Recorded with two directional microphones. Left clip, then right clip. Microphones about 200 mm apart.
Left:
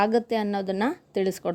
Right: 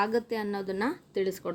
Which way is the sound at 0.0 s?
40° left (ahead or behind).